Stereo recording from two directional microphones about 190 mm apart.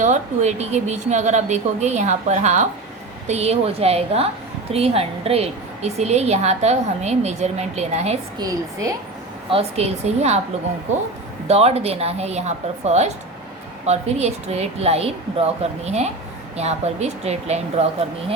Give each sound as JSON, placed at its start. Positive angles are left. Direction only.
{"t": 0.0, "sound": "a woman's voice", "side_deg": -40}
{"t": 8.4, "sound": "a woman's voice", "side_deg": -20}
{"t": 9.5, "sound": "a woman's voice", "side_deg": -30}
{"t": 11.4, "sound": "a woman's voice", "side_deg": -35}